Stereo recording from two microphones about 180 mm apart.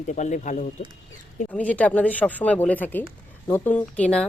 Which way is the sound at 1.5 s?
10° left (ahead or behind).